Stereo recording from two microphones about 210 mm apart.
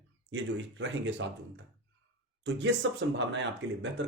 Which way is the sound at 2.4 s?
60° right (ahead or behind).